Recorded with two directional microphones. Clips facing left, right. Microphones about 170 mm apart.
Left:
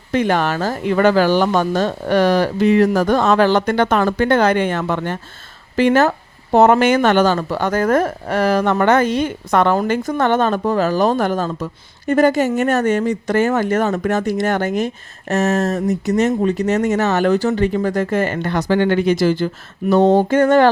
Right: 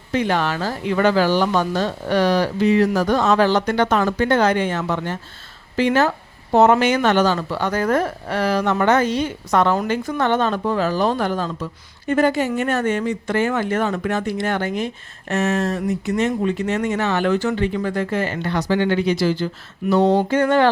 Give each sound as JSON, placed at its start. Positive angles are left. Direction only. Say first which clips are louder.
{"t": 0.1, "sound": "speech", "louder": "left 3 dB", "side_deg": 50}